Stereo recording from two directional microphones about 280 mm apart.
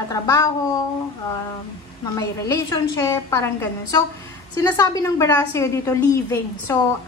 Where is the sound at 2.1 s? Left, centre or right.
Centre.